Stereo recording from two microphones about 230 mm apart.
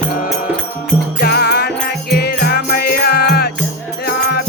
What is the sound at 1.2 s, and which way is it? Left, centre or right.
Music, left.